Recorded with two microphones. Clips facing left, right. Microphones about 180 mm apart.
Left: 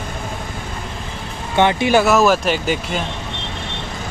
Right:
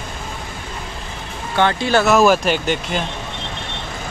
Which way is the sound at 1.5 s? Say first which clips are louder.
Left 2 dB; 15° left (ahead or behind).